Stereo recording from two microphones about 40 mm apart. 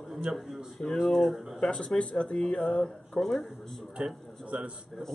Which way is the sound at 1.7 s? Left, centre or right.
Left.